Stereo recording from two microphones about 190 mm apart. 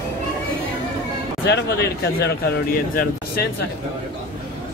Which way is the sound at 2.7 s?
50° left (ahead or behind).